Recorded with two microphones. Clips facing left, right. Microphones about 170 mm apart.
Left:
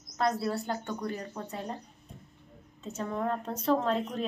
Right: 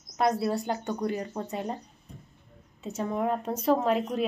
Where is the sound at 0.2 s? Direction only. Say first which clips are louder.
Right 3 dB; 15° right (ahead or behind).